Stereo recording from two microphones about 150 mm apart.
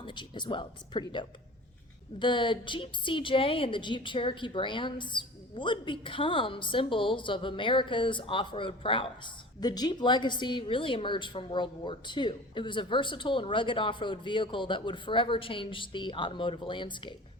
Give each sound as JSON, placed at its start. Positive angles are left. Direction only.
{"t": 0.0, "sound": "a woman's voice", "side_deg": 30}